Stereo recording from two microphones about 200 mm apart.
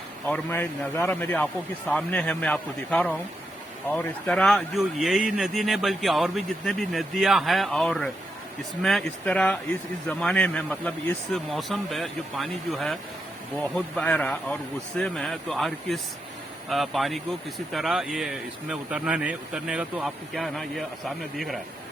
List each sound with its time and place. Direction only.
0.3 s a man's voice: 10° left (ahead or behind)